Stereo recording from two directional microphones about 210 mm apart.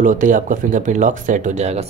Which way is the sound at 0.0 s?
40° right (ahead or behind).